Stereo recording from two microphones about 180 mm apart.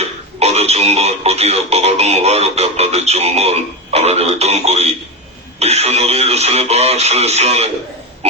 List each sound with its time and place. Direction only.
0.0 s speech: 35° right (ahead or behind)